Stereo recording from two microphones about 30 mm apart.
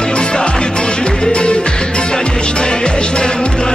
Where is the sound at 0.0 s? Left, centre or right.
Left.